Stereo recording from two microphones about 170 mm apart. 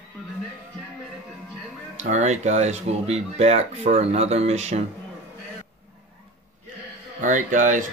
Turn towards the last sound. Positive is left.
turn(degrees=-50)  # may be behind; listen again after turning